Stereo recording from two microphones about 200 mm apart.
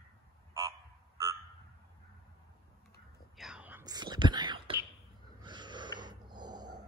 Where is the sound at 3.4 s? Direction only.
5° right (ahead or behind); by 4.6 s 20° right (ahead or behind).